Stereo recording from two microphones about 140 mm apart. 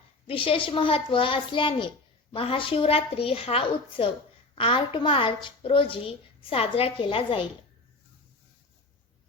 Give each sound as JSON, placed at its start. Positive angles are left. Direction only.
{"t": 0.3, "sound": "a woman's voice", "side_deg": 40}